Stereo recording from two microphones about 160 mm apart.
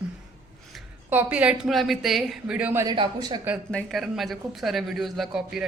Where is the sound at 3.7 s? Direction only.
5° left (ahead or behind).